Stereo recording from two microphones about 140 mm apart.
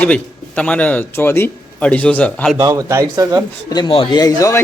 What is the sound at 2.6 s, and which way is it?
Speech, 25° right (ahead or behind).